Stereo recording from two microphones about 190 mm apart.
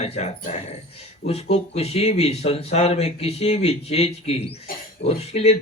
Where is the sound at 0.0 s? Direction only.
35° left (ahead or behind).